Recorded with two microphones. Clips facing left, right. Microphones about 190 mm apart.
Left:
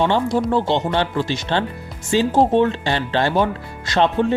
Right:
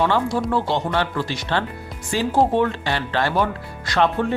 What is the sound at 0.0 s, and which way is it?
Speech, 25° left (ahead or behind).